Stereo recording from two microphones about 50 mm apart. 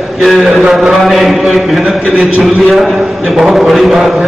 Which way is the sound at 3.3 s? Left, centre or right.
Centre.